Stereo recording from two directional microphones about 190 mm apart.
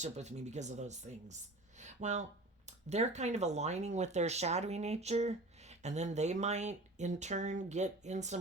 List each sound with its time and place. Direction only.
0.0 s speech: 35° right (ahead or behind)